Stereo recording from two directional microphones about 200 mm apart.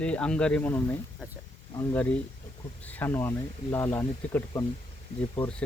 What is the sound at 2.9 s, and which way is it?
Speech, 10° left (ahead or behind).